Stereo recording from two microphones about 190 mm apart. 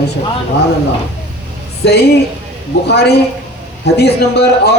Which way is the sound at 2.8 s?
60° left (ahead or behind).